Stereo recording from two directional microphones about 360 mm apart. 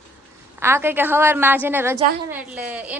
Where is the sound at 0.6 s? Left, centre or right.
Centre.